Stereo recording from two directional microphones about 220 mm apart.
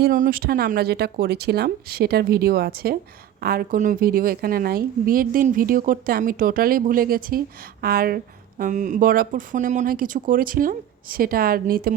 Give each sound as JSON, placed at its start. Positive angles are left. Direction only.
{"t": 0.0, "sound": "a woman's voice", "side_deg": -40}